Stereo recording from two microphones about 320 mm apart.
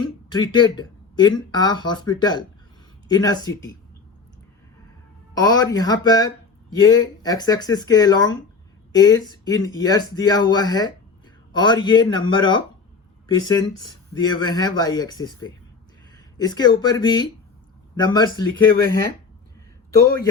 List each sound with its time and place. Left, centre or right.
0.3 s speech: centre
5.3 s speech: centre